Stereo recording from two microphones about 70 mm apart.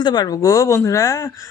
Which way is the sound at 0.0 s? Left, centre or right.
Left.